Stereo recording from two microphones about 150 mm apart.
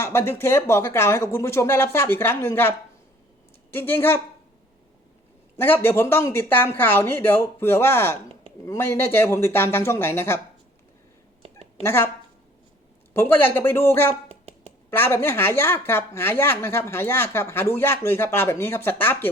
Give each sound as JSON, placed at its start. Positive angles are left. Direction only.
{"t": 0.0, "sound": "a woman's voice", "side_deg": 15}
{"t": 5.5, "sound": "a woman's voice", "side_deg": 15}
{"t": 11.8, "sound": "a woman's voice", "side_deg": 15}
{"t": 13.1, "sound": "a woman's voice", "side_deg": 15}